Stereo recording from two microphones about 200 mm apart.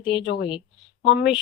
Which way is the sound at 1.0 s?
60° left (ahead or behind).